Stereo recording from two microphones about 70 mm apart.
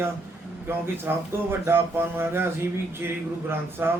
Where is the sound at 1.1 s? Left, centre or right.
Right.